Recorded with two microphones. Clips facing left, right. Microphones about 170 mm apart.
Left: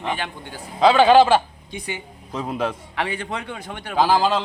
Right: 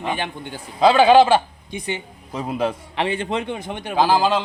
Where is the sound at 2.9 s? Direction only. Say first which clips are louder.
Right 4 dB; 25° right (ahead or behind).